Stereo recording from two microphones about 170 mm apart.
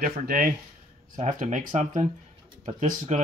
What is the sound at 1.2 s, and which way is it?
Speech, 45° right (ahead or behind).